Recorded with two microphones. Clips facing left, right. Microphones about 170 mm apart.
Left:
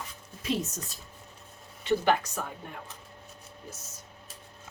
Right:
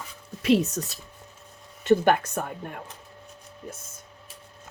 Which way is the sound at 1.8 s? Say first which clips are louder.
Right 6 dB; 50° right (ahead or behind).